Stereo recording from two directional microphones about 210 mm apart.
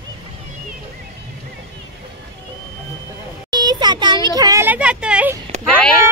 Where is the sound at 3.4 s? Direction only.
20° right (ahead or behind).